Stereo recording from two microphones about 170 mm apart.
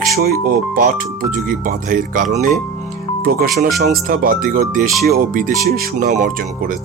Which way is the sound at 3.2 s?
60° right (ahead or behind).